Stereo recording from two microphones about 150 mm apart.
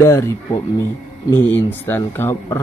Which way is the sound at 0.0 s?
15° left (ahead or behind).